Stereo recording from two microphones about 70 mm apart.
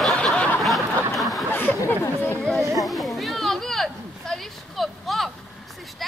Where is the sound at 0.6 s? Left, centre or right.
Centre.